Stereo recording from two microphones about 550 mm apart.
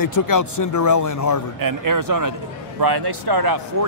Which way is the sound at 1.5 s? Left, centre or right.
Right.